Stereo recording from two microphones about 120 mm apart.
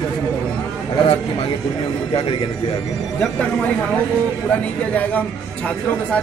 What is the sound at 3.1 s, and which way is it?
Speech, 10° left (ahead or behind).